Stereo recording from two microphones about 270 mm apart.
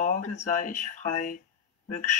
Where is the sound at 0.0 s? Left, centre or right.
Left.